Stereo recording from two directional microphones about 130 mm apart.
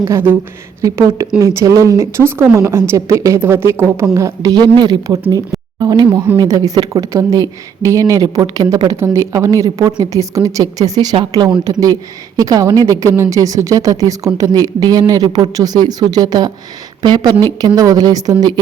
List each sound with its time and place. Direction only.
0.0 s speech: 20° right (ahead or behind)